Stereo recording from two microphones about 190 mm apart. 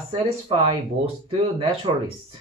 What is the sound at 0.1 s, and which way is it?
Speech, 30° right (ahead or behind).